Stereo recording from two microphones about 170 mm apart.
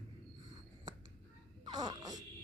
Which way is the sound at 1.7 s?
20° right (ahead or behind).